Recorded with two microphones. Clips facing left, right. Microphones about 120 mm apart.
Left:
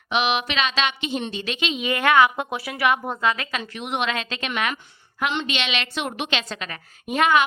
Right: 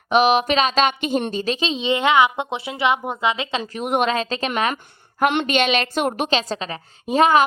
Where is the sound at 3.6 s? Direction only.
40° right (ahead or behind).